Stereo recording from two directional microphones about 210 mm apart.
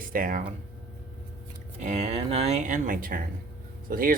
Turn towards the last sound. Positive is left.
turn(degrees=-45)  # may be behind; listen again after turning